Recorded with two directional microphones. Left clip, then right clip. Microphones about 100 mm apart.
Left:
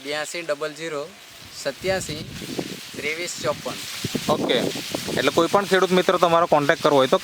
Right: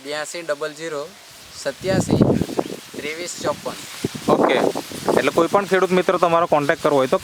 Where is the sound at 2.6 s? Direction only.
70° right (ahead or behind).